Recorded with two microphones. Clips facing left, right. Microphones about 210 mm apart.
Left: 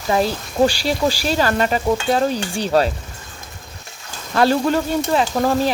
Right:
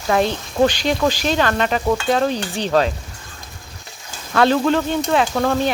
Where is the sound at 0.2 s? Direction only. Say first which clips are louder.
Even; 5° left (ahead or behind).